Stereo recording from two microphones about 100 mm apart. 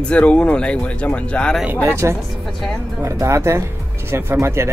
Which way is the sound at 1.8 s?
25° right (ahead or behind).